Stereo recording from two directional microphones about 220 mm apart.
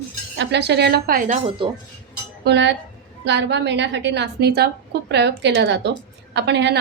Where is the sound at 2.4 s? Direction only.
50° right (ahead or behind).